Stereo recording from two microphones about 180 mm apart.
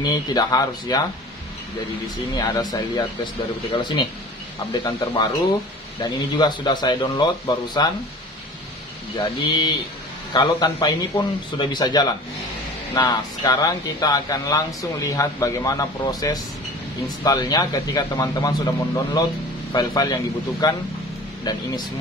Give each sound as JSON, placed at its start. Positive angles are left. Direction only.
{"t": 0.0, "sound": "speech", "side_deg": 20}
{"t": 2.3, "sound": "speech", "side_deg": 20}
{"t": 9.4, "sound": "speech", "side_deg": 25}
{"t": 19.7, "sound": "speech", "side_deg": 20}